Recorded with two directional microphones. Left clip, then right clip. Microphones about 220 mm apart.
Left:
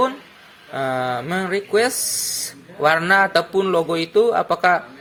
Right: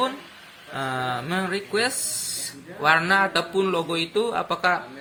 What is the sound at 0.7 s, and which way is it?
Speech, 30° left (ahead or behind).